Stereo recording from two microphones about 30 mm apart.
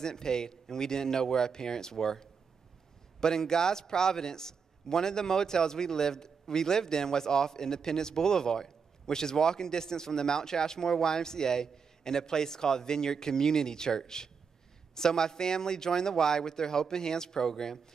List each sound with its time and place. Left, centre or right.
0.0 s a man's voice: left